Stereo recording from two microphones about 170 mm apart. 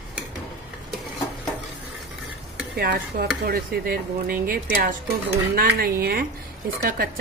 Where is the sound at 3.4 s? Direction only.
60° right (ahead or behind).